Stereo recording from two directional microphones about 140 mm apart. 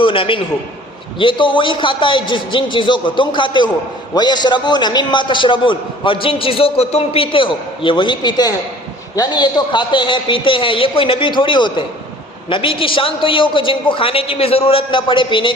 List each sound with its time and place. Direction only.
0.0 s a man's voice: 40° left (ahead or behind)